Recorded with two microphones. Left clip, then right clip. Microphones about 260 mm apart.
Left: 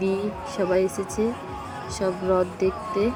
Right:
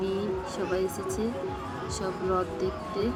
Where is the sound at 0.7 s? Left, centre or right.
Centre.